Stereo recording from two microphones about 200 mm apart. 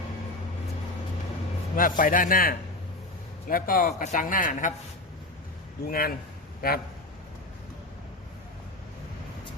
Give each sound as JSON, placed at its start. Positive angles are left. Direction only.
{"t": 1.7, "sound": "a man's voice", "side_deg": 45}
{"t": 5.9, "sound": "a man's voice", "side_deg": 50}